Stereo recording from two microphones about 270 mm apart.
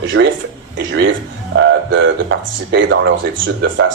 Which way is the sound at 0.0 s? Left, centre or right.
Right.